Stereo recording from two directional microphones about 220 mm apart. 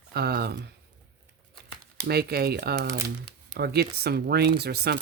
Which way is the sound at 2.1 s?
45° right (ahead or behind).